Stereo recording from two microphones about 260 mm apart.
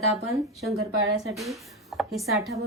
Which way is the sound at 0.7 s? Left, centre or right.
Right.